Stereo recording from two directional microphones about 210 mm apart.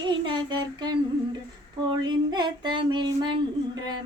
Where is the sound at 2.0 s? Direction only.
20° right (ahead or behind).